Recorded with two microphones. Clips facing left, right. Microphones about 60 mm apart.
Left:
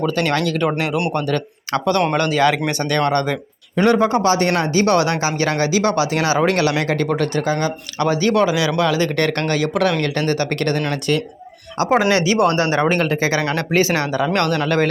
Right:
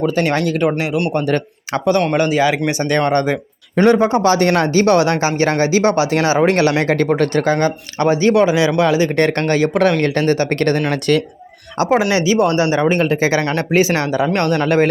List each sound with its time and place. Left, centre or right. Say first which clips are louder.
0.0 s speech: right 2 dB; centre
4.2 s speech: right 3 dB; right
8.0 s speech: right 3 dB; right
10.9 s speech: right 4 dB; right
11.9 s speech: right 1 dB; centre
12.9 s speech: right 3 dB; centre